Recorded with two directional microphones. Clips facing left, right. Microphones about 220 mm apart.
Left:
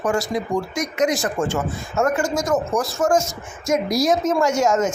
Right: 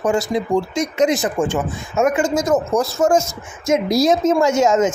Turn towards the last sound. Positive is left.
turn(degrees=-20)  # may be behind; listen again after turning